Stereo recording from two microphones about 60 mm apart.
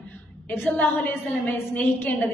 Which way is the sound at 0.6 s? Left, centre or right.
Left.